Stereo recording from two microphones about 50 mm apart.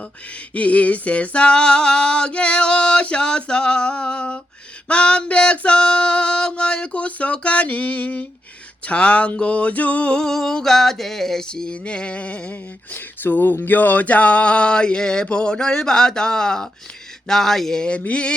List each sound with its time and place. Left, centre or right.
0.5 s music: left
8.9 s a sound: left
11.7 s music: left
13.2 s music: left; by 16.6 s centre
17.2 s a sound: centre
18.0 s music: left